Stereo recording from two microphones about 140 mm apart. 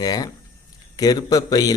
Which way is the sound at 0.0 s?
25° left (ahead or behind).